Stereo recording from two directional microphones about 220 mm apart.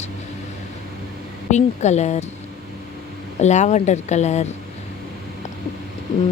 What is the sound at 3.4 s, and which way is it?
Speech, 30° left (ahead or behind).